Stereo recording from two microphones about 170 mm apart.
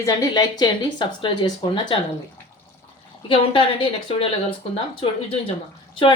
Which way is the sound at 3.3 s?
30° left (ahead or behind).